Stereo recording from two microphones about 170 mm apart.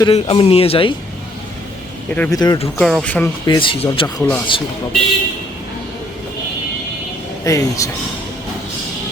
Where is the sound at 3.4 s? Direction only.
30° left (ahead or behind).